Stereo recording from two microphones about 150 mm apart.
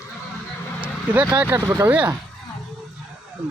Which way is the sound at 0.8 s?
10° right (ahead or behind).